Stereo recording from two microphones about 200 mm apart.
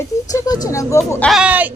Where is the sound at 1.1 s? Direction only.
5° left (ahead or behind).